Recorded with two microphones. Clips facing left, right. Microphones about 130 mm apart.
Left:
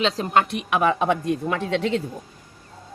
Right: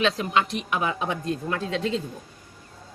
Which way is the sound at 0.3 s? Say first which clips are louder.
Left 4 dB; 60° left (ahead or behind).